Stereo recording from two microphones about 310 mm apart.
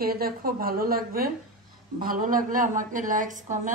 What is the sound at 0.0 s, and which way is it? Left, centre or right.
A woman's voice, right.